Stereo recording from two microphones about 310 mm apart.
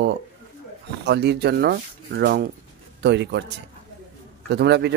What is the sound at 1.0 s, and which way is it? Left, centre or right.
Speech, right.